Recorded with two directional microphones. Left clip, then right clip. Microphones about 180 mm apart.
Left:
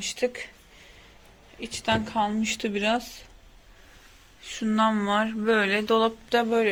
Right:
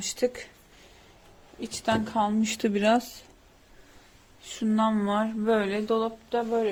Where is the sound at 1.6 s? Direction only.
25° right (ahead or behind).